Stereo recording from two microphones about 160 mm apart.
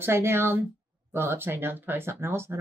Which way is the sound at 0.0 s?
15° right (ahead or behind).